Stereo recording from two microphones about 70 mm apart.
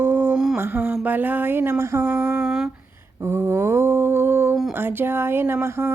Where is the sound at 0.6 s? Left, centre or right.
Right.